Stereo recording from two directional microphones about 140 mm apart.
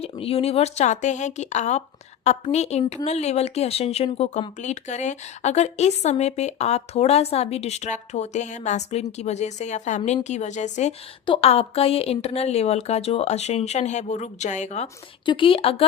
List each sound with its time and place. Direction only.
0.0 s a woman's voice: 45° left (ahead or behind)
11.3 s a woman's voice: 45° left (ahead or behind)
15.3 s speech: 40° left (ahead or behind)